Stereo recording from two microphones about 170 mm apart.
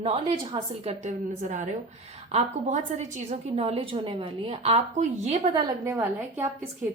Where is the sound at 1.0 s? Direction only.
45° right (ahead or behind).